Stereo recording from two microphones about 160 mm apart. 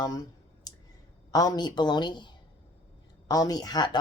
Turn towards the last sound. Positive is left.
turn(degrees=25)  # may be behind; listen again after turning